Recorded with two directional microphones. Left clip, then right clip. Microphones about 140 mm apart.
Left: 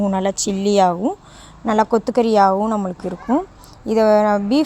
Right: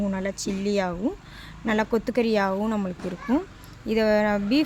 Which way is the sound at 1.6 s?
25° left (ahead or behind).